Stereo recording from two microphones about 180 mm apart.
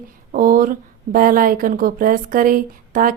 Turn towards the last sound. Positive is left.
turn(degrees=-50)  # may be behind; listen again after turning